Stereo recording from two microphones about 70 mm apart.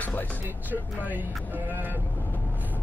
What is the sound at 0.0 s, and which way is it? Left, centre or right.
Music, left.